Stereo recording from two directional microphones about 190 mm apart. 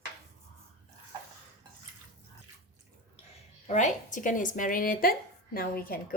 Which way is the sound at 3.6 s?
40° left (ahead or behind).